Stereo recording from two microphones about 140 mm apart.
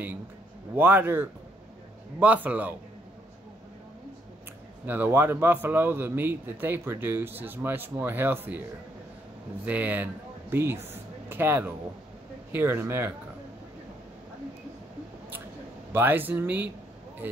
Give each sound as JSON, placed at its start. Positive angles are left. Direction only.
{"t": 0.7, "sound": "a man's voice", "side_deg": -15}
{"t": 4.8, "sound": "a man's voice", "side_deg": -15}
{"t": 9.7, "sound": "a man's voice", "side_deg": -10}
{"t": 15.9, "sound": "a man's voice", "side_deg": -15}